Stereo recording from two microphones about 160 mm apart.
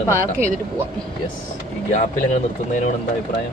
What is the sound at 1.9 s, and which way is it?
Speech, 45° left (ahead or behind).